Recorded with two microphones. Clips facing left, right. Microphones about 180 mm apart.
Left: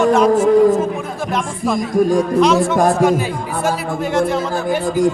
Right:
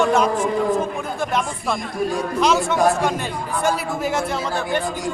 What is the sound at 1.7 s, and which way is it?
Speech, 45° left (ahead or behind).